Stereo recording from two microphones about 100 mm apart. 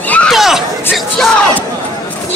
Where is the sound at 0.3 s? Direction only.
Centre (ahead or behind).